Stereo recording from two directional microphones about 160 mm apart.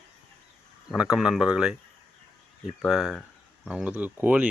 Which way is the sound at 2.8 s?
5° right (ahead or behind).